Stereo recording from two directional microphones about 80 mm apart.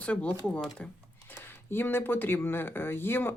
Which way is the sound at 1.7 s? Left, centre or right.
Left.